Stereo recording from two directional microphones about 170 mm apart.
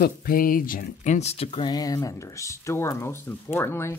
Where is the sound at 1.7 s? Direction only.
20° left (ahead or behind).